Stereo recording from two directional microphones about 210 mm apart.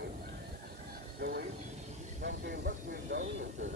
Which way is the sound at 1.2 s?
50° right (ahead or behind).